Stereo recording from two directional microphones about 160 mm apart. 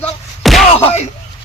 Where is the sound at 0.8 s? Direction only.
40° left (ahead or behind).